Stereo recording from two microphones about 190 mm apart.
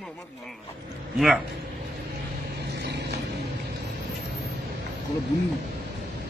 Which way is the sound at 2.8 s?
65° right (ahead or behind).